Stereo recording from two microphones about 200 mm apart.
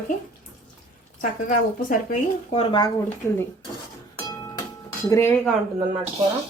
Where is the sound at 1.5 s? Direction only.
45° left (ahead or behind).